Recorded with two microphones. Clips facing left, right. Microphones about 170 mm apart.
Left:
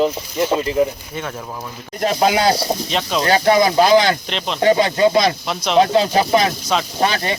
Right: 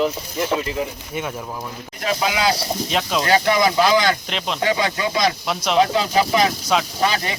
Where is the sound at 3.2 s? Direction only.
40° left (ahead or behind).